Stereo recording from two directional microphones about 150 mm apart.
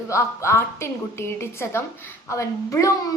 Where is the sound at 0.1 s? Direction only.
20° left (ahead or behind).